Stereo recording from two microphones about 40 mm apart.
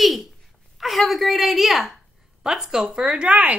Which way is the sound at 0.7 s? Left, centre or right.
Centre.